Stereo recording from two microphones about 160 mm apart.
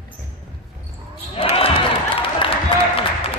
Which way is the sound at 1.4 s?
35° left (ahead or behind).